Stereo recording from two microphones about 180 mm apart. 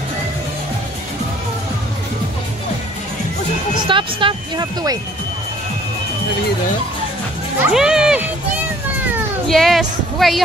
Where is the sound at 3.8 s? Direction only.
25° right (ahead or behind).